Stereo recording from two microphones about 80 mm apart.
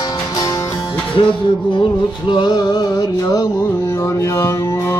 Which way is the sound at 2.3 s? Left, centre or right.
Left.